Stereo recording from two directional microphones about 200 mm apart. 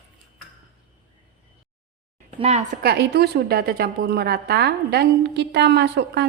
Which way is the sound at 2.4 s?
35° right (ahead or behind).